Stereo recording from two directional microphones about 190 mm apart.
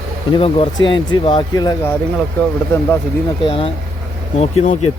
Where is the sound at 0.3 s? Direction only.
30° left (ahead or behind).